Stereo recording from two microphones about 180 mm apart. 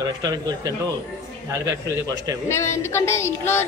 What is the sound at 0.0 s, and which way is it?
Speech, 20° right (ahead or behind).